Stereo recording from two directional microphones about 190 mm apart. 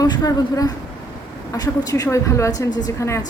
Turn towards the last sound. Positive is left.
turn(degrees=15)  # may be behind; listen again after turning